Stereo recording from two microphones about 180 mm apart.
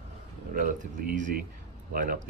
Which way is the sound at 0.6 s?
45° right (ahead or behind).